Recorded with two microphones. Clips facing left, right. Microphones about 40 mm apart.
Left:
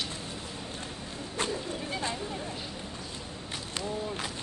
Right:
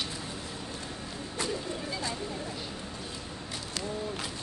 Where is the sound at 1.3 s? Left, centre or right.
Left.